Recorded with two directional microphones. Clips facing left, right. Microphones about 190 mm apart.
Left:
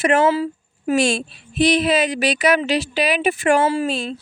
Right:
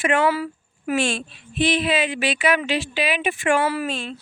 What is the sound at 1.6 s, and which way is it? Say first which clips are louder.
Speech: left 4 dB; 40° left (ahead or behind).